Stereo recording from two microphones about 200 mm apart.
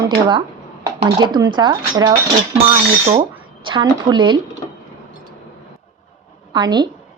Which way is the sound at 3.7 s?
25° right (ahead or behind).